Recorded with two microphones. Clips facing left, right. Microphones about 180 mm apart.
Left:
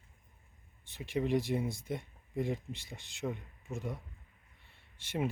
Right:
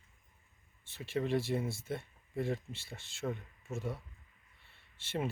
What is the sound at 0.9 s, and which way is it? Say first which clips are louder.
Speech: left 1 dB; 15° left (ahead or behind).